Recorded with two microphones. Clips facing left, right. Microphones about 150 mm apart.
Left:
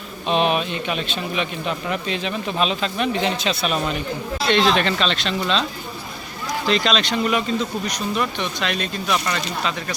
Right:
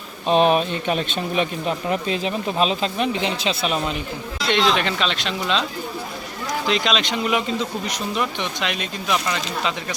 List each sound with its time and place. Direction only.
0.3 s a man's voice: 40° right (ahead or behind)
1.9 s speech: 35° right (ahead or behind)
4.5 s speech: 10° right (ahead or behind)
6.7 s speech: 15° right (ahead or behind)